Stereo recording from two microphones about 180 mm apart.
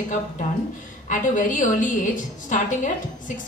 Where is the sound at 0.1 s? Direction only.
45° left (ahead or behind).